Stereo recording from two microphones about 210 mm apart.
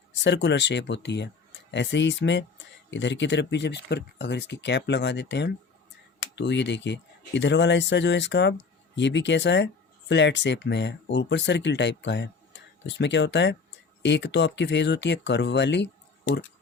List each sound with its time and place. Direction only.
0.2 s speech: 60° left (ahead or behind)